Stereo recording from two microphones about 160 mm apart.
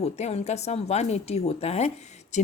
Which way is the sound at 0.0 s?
40° left (ahead or behind).